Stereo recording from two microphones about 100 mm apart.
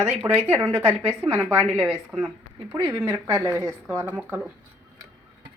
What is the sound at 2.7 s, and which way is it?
Speech, 40° right (ahead or behind).